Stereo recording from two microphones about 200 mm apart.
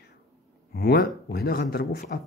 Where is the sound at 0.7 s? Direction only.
50° left (ahead or behind).